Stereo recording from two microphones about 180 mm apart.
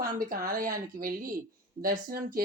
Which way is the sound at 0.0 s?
50° right (ahead or behind).